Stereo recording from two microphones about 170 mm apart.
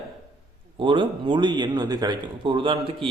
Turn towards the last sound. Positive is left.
turn(degrees=-30)  # may be behind; listen again after turning